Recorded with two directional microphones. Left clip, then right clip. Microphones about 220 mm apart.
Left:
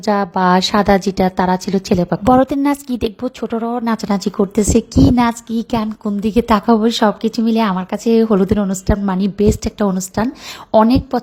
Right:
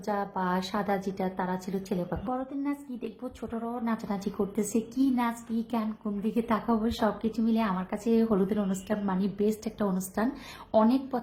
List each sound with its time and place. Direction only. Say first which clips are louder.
0.0 s a woman's voice: left 15 dB; 40° left (ahead or behind)
5.7 s a woman's voice: left 14 dB; 40° left (ahead or behind)